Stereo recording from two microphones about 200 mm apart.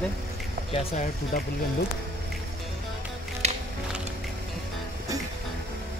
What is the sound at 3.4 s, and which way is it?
Music, 35° right (ahead or behind).